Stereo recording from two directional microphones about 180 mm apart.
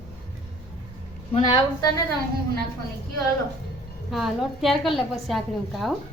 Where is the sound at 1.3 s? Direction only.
30° left (ahead or behind).